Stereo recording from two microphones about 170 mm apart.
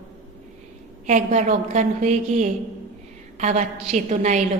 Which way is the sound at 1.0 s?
45° right (ahead or behind).